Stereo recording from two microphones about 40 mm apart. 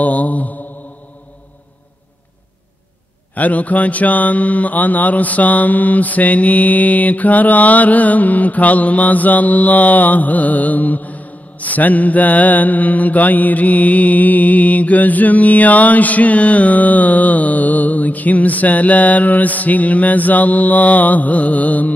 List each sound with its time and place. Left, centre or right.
0.0 s mantra: left
3.3 s mantra: left